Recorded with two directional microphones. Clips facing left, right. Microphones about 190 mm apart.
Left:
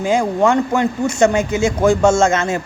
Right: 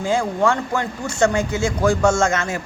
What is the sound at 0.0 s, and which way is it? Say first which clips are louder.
A man's voice: left 4 dB; 20° left (ahead or behind).